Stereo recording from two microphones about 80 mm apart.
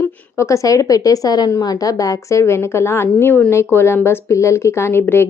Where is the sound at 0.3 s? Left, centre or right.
Left.